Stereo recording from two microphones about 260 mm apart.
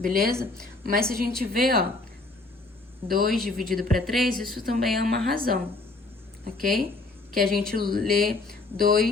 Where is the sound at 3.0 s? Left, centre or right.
Right.